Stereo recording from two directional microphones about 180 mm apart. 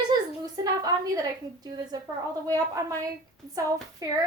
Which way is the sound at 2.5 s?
20° right (ahead or behind).